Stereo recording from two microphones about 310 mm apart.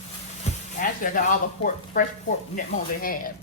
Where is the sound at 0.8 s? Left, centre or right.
Left.